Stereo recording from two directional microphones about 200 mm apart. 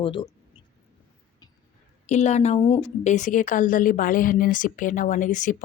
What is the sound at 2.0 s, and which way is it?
A woman's voice, 35° left (ahead or behind).